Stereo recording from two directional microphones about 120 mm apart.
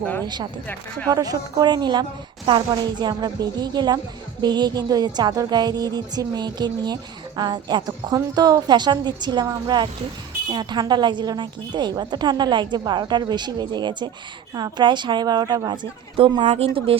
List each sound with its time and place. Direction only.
0.0 s speech: 15° left (ahead or behind)
1.1 s a woman's voice: 30° right (ahead or behind); by 17.0 s 50° right (ahead or behind)